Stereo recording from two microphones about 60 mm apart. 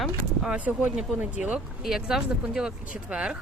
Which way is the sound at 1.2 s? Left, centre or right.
Right.